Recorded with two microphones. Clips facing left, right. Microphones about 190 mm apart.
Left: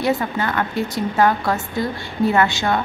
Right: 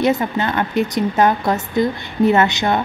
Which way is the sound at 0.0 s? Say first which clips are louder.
Right 3 dB; 20° right (ahead or behind).